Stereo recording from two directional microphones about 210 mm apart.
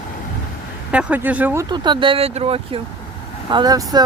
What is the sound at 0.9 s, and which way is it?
Speech, 5° right (ahead or behind).